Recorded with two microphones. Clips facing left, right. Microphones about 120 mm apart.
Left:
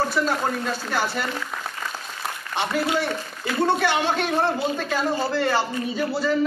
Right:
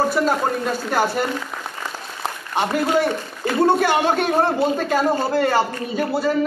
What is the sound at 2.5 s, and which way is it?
A man's voice, 45° right (ahead or behind).